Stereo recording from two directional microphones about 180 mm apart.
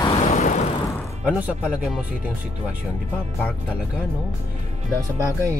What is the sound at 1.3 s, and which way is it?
Speech, 5° right (ahead or behind).